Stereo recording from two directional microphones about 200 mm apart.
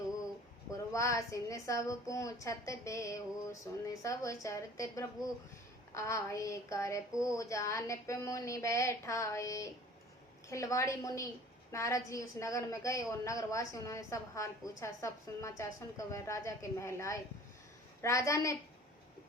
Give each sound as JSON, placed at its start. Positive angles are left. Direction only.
{"t": 0.7, "sound": "a woman's voice", "side_deg": 15}